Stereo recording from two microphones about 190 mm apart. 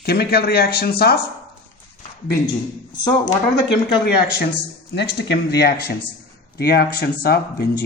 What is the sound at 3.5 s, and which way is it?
A man's voice, 60° left (ahead or behind).